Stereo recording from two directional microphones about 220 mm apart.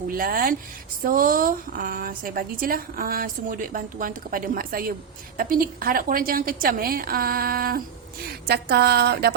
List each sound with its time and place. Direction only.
0.1 s a woman's voice: 40° right (ahead or behind)